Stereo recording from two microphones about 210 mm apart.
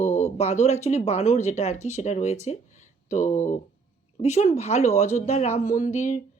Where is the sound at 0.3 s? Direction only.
30° left (ahead or behind).